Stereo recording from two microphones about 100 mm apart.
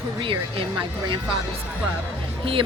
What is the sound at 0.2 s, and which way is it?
Speech, 60° right (ahead or behind).